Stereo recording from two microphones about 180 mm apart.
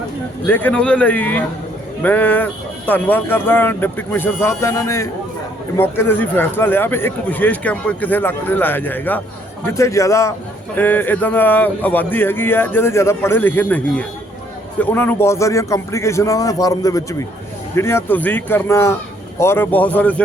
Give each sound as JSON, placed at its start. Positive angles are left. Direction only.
{"t": 0.4, "sound": "speech", "side_deg": 10}